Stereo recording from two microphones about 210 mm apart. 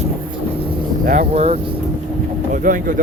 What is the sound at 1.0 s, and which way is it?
Speech, 40° right (ahead or behind).